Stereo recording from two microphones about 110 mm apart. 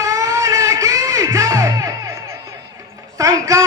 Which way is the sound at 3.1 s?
30° right (ahead or behind).